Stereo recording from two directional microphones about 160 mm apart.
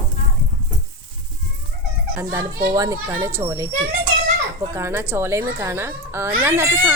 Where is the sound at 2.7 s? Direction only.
20° right (ahead or behind).